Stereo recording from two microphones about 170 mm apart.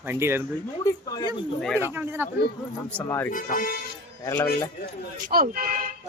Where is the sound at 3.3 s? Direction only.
50° left (ahead or behind).